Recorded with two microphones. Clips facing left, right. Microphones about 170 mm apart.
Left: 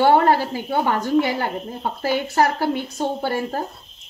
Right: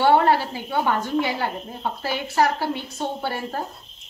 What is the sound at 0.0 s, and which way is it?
Speech, 45° left (ahead or behind).